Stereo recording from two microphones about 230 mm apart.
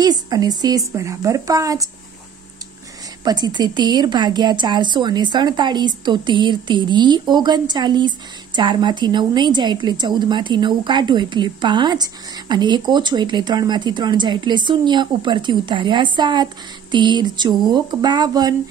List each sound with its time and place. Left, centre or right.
0.0 s a woman's voice: centre
3.3 s a woman's voice: centre